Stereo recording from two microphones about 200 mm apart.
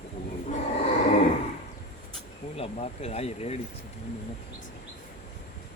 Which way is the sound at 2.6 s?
30° left (ahead or behind).